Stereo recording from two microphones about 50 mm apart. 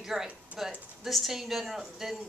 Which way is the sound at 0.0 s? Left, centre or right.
Centre.